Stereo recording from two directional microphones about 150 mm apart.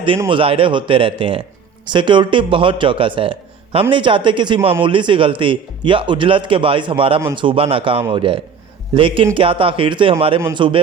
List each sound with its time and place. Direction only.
0.3 s speech: 35° right (ahead or behind)